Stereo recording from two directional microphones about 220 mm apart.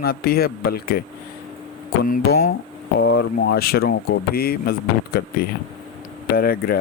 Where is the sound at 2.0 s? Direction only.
40° left (ahead or behind).